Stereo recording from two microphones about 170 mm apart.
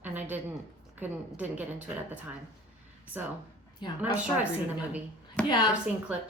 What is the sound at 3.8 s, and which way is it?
Speech, 25° left (ahead or behind).